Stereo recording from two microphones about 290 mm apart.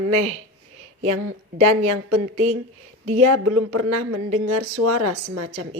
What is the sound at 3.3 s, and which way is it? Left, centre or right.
Speech, right.